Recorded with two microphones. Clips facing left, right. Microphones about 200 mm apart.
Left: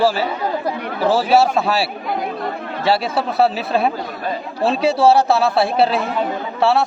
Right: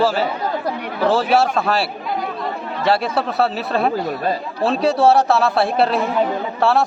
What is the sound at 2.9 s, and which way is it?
A man's voice, 5° left (ahead or behind).